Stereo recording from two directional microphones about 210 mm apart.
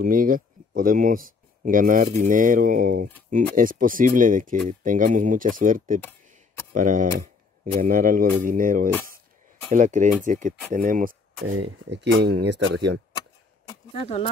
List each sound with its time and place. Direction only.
0.0 s speech: 40° right (ahead or behind)
11.3 s speech: 75° right (ahead or behind)
14.0 s speech: 30° left (ahead or behind)